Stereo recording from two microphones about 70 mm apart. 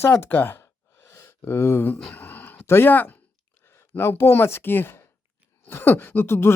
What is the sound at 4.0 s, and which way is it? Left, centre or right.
A woman's voice, left.